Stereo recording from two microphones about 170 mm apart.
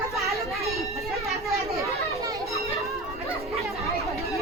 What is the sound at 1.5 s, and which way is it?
Children playing, 20° right (ahead or behind).